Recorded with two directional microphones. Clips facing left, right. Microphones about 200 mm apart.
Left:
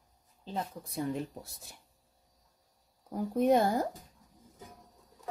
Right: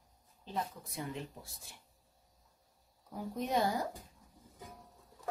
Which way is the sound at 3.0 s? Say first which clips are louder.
Left 11 dB; 55° left (ahead or behind).